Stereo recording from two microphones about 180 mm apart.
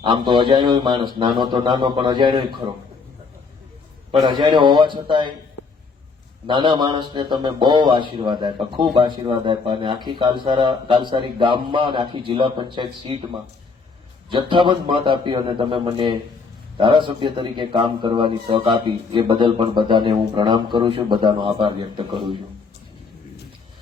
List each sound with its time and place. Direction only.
0.0 s a man's voice: 25° right (ahead or behind)
4.1 s a man's voice: 25° right (ahead or behind)
6.5 s a man's voice: 25° right (ahead or behind)